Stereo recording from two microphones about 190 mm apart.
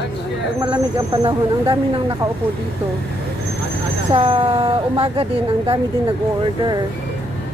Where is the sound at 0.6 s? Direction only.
25° right (ahead or behind).